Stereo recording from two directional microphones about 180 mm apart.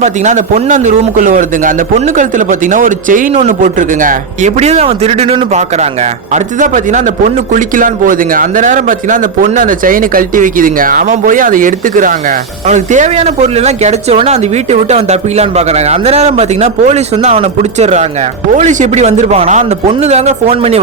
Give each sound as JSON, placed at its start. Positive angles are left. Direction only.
{"t": 0.0, "sound": "a man's voice", "side_deg": -40}